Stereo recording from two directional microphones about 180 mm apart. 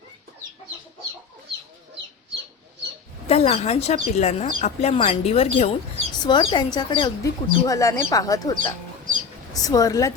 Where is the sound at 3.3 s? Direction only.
35° left (ahead or behind).